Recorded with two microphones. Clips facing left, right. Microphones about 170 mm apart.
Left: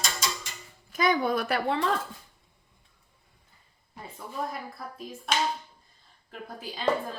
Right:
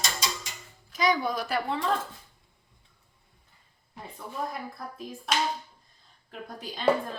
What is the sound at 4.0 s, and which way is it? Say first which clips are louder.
A woman's voice: even; centre (ahead or behind).